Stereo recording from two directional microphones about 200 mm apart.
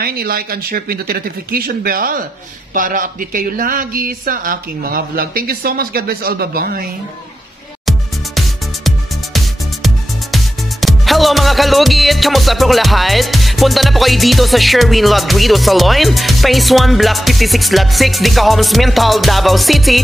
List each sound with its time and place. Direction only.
0.0 s speech: 50° right (ahead or behind)
8.4 s music: centre (ahead or behind)